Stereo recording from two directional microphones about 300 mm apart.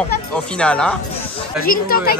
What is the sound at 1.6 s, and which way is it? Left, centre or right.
Speech, left.